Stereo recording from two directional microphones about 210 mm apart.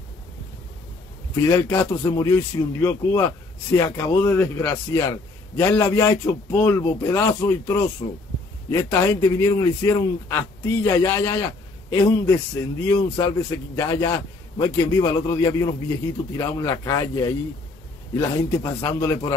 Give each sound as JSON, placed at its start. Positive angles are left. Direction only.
{"t": 1.3, "sound": "a man's voice", "side_deg": 15}
{"t": 8.0, "sound": "a man's voice", "side_deg": 25}